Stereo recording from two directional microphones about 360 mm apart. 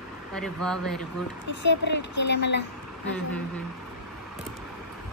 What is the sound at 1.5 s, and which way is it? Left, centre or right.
Speech, left.